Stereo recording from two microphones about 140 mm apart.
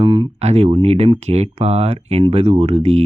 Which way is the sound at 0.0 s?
35° right (ahead or behind).